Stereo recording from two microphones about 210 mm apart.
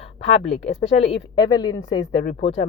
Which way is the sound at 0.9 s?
20° left (ahead or behind).